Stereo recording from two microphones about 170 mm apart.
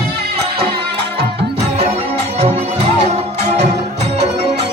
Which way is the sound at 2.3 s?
35° right (ahead or behind).